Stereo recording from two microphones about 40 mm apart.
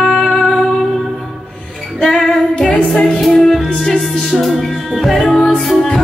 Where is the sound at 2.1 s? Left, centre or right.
Left.